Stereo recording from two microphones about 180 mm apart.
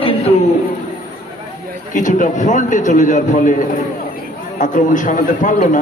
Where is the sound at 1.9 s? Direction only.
45° left (ahead or behind).